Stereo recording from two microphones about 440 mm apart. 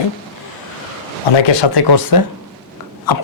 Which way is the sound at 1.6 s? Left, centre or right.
Left.